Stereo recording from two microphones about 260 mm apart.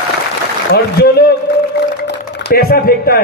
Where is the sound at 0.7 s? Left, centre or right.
Left.